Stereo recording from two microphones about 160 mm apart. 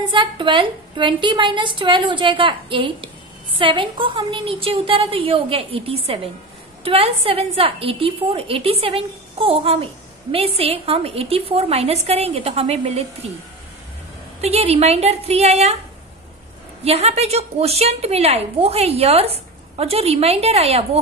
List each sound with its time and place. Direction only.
0.1 s a woman's voice: 30° right (ahead or behind)
14.4 s a woman's voice: 40° right (ahead or behind)
16.8 s a woman's voice: 40° right (ahead or behind)